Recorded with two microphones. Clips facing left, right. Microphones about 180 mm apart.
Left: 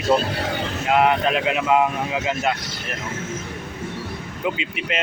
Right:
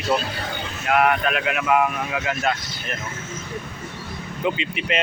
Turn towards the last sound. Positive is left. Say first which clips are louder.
# right 2 dB
turn(degrees=5)  # may be behind; listen again after turning